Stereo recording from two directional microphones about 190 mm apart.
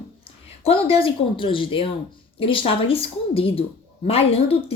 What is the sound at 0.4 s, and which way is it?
A woman's voice, 30° left (ahead or behind).